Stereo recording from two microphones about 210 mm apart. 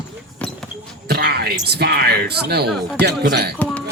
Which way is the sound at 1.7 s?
50° right (ahead or behind).